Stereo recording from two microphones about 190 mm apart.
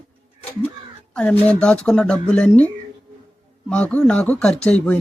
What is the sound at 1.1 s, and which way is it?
Speech, 5° left (ahead or behind).